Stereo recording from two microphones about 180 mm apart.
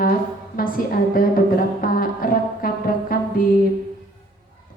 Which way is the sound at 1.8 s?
55° left (ahead or behind).